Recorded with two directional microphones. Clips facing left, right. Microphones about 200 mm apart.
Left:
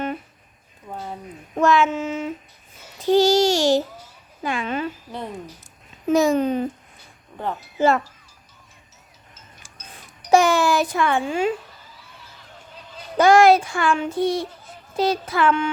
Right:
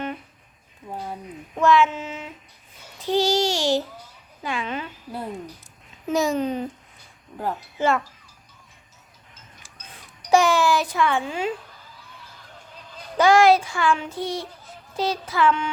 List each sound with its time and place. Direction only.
0.9 s a sound: 5° right (ahead or behind)
1.5 s child singing: 45° left (ahead or behind)
3.1 s babbling: 45° left (ahead or behind)
4.4 s child singing: 45° left (ahead or behind)
6.1 s speech: 55° left (ahead or behind)
7.8 s wind chime: 40° left (ahead or behind)
9.6 s a sound: 45° left (ahead or behind)
10.3 s child singing: 50° left (ahead or behind)
13.1 s child singing: 50° left (ahead or behind)
14.9 s speech: 55° left (ahead or behind)